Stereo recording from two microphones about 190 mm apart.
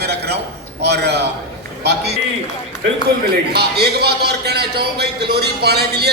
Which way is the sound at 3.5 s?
60° right (ahead or behind).